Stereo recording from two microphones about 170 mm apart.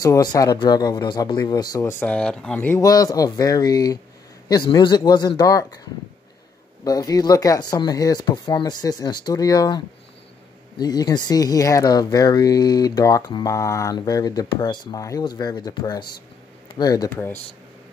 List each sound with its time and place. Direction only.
0.0 s speech: 20° left (ahead or behind)
6.8 s speech: 20° left (ahead or behind)